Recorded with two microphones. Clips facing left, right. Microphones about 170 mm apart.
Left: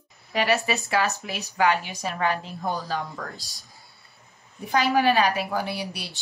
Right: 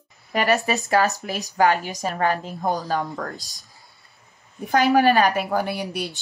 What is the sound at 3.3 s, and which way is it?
Speech, 20° right (ahead or behind).